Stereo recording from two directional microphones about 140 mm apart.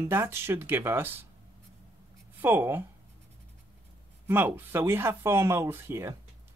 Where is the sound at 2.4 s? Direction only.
15° right (ahead or behind).